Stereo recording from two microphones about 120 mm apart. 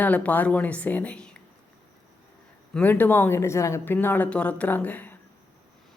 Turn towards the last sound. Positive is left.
turn(degrees=15)  # may be behind; listen again after turning